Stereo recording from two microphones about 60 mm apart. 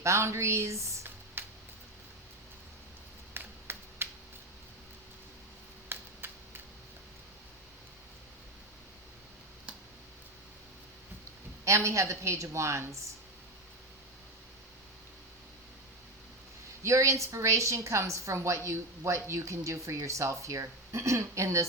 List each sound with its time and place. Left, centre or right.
0.0 s a woman's voice: right
1.4 s music: right
3.3 s a sound: right
5.9 s a sound: right
11.6 s a woman's voice: right
16.8 s a woman's voice: right